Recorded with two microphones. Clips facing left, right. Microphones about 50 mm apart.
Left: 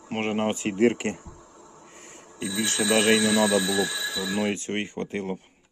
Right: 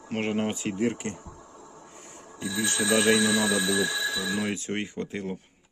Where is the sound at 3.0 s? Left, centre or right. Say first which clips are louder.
Left 2 dB; left.